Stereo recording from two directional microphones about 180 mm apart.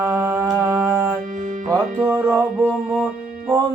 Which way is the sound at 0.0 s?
15° right (ahead or behind).